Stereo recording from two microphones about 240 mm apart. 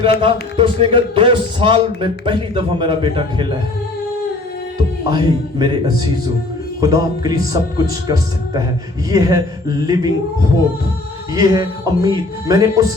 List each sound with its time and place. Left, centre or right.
0.2 s a man's voice: right
5.1 s speech: centre
11.3 s speech: centre